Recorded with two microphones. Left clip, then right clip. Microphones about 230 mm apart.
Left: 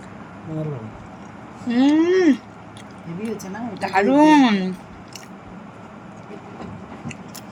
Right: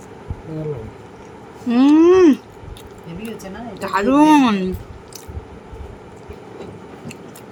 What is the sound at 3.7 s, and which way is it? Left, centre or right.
Speech, centre.